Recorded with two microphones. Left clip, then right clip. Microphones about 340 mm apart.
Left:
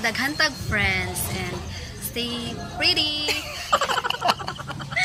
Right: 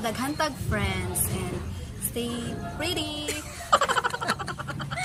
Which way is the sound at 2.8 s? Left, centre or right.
Centre.